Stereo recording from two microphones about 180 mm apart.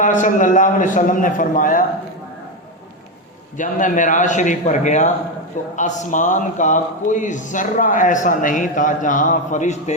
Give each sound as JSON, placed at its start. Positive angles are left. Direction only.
{"t": 0.0, "sound": "a man's voice", "side_deg": 45}
{"t": 3.6, "sound": "a man's voice", "side_deg": 45}